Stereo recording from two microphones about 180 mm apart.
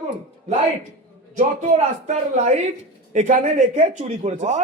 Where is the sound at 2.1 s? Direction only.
40° right (ahead or behind).